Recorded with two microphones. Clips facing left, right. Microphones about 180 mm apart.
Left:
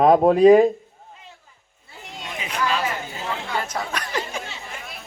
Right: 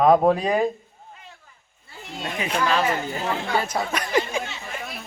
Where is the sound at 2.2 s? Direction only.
50° right (ahead or behind).